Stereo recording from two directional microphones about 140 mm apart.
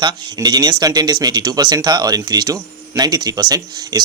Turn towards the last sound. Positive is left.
turn(degrees=-30)  # may be behind; listen again after turning